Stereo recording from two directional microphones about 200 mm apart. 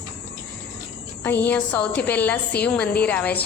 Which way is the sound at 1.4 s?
5° left (ahead or behind).